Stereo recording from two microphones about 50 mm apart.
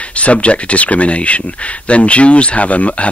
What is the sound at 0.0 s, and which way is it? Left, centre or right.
Speech, left.